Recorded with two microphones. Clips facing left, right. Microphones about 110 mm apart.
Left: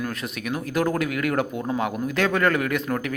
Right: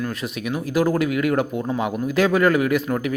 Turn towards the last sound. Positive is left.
turn(degrees=-5)  # may be behind; listen again after turning